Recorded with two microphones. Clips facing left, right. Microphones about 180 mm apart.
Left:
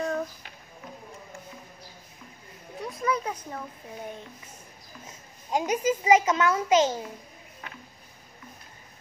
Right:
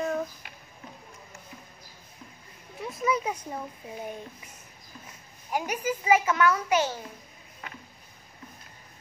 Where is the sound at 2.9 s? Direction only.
5° right (ahead or behind).